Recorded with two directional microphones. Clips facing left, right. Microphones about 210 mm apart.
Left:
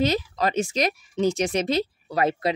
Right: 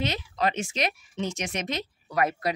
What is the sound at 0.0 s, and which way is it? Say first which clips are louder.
Speech: left 5 dB; 40° left (ahead or behind).